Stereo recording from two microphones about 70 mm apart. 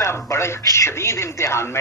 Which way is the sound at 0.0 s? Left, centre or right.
Left.